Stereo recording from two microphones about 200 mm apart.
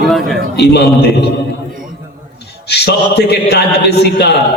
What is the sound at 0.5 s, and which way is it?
Speech, 55° left (ahead or behind).